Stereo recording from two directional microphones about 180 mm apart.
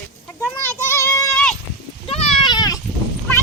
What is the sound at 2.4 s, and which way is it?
Goat, 20° left (ahead or behind).